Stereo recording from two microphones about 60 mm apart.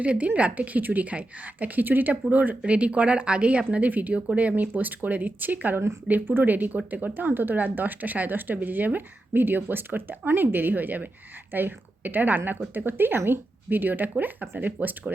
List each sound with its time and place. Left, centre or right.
0.0 s a woman's voice: right